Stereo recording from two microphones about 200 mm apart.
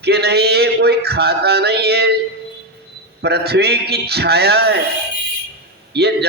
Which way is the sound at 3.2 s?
55° right (ahead or behind).